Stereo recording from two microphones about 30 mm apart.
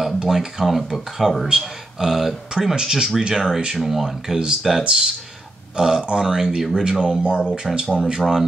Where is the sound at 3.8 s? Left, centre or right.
Centre.